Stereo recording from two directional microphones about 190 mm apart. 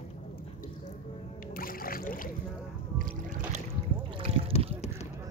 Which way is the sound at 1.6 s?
50° left (ahead or behind).